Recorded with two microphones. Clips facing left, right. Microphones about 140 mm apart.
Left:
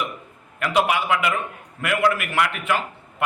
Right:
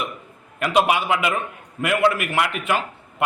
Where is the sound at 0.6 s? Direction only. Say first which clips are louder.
Right 2 dB; 25° right (ahead or behind).